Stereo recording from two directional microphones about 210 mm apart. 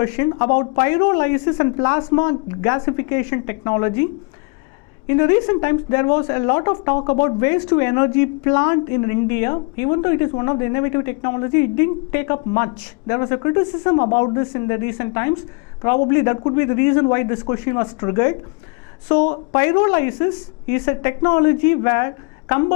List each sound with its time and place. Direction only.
0.0 s speech: 15° left (ahead or behind)
19.5 s speech: 15° left (ahead or behind)